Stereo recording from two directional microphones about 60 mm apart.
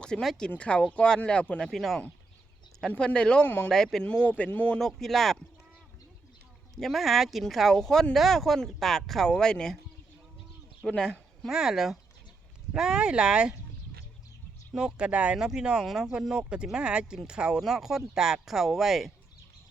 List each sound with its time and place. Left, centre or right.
0.0 s speech: centre
1.7 s speech: centre
3.0 s speech: centre
3.4 s speech: left
3.7 s speech: centre
4.0 s speech: centre
4.8 s speech: centre
6.7 s speech: centre
10.8 s speech: centre
11.4 s speech: centre
14.7 s speech: centre